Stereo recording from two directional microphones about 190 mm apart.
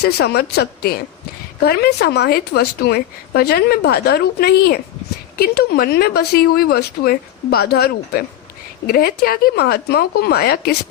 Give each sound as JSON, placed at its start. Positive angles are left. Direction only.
{"t": 0.0, "sound": "a woman's voice", "side_deg": 55}